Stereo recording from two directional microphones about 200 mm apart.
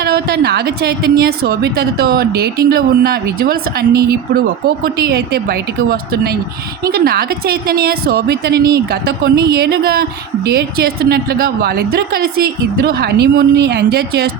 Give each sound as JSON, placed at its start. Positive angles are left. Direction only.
{"t": 0.0, "sound": "a woman's voice", "side_deg": -55}